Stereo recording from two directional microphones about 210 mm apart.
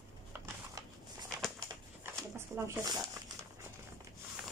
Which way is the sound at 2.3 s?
15° right (ahead or behind).